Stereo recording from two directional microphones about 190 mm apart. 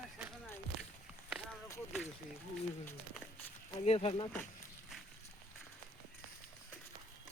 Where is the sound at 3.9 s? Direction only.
30° left (ahead or behind).